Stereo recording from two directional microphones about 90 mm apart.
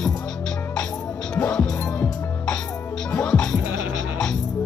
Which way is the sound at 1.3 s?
10° left (ahead or behind).